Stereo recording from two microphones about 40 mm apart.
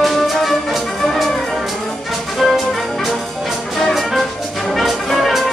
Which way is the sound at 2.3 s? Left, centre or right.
Centre.